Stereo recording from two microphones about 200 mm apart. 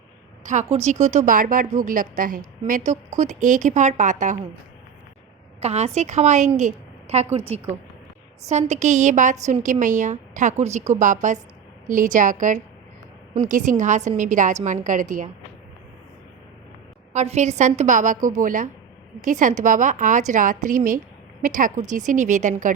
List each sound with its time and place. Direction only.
0.7 s a woman's voice: 35° right (ahead or behind)
5.5 s a woman's voice: 30° right (ahead or behind)
8.4 s a woman's voice: 35° right (ahead or behind)
17.1 s a woman's voice: 35° right (ahead or behind)